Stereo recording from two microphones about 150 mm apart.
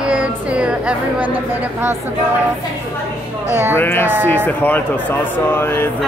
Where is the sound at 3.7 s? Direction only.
15° left (ahead or behind).